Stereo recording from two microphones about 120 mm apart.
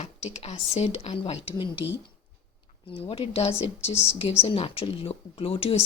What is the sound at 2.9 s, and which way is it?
Speech, 50° left (ahead or behind).